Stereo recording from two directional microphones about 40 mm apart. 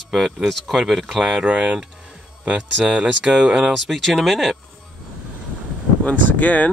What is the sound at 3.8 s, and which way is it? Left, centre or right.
Speech, centre.